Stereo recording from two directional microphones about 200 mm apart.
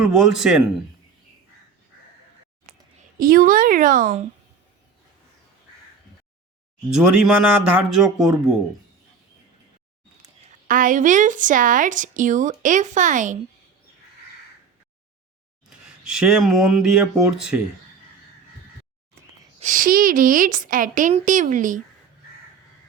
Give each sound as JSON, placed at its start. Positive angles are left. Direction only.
{"t": 0.0, "sound": "speech", "side_deg": -5}
{"t": 3.2, "sound": "a woman's voice", "side_deg": -45}
{"t": 6.9, "sound": "speech", "side_deg": -5}
{"t": 10.7, "sound": "speech", "side_deg": -40}
{"t": 15.7, "sound": "speech", "side_deg": -5}
{"t": 19.5, "sound": "speech", "side_deg": -40}